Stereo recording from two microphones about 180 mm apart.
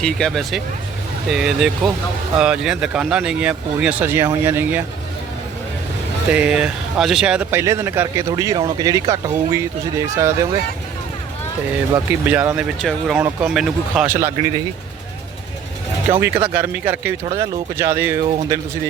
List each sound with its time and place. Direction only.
0.0 s speech: 5° left (ahead or behind)
6.3 s speech: 5° right (ahead or behind)
11.9 s speech: 10° right (ahead or behind)
16.2 s speech: 10° right (ahead or behind)